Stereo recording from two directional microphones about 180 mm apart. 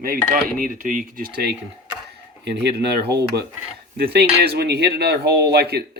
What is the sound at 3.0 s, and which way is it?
Speech, 65° right (ahead or behind).